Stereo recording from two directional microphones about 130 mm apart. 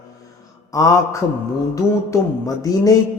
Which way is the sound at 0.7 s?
25° left (ahead or behind).